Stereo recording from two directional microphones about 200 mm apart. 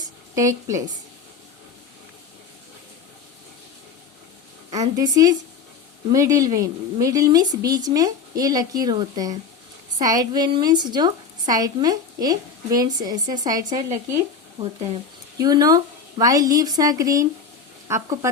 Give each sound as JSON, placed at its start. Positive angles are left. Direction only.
{"t": 0.0, "sound": "a sound", "side_deg": -15}
{"t": 4.7, "sound": "a woman's voice", "side_deg": -20}
{"t": 15.4, "sound": "speech", "side_deg": -20}